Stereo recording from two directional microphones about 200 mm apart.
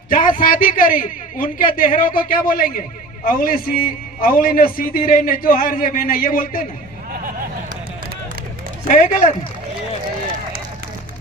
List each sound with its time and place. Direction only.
0.1 s a man's voice: 45° left (ahead or behind)
8.9 s speech: 35° left (ahead or behind)